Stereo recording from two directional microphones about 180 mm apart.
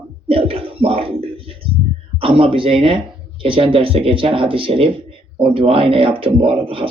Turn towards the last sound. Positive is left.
turn(degrees=-30)  # may be behind; listen again after turning